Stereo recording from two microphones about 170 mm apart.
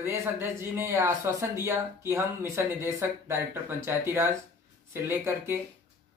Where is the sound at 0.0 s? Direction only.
15° right (ahead or behind).